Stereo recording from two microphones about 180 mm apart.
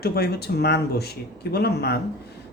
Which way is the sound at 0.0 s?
60° left (ahead or behind).